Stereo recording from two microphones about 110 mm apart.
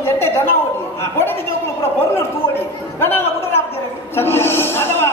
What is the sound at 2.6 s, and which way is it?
A man's voice, 20° left (ahead or behind).